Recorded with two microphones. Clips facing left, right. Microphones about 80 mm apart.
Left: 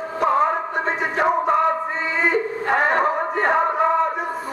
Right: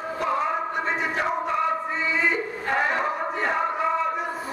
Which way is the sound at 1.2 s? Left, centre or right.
Left.